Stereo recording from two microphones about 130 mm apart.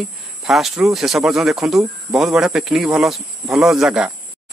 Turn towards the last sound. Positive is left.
turn(degrees=-5)  # may be behind; listen again after turning